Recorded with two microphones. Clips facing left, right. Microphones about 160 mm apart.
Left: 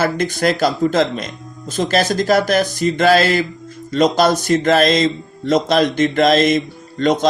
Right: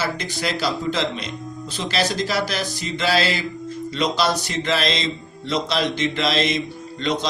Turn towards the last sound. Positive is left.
turn(degrees=50)  # may be behind; listen again after turning